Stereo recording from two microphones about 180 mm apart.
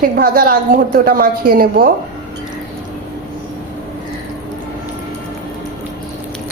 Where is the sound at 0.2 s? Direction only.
55° right (ahead or behind).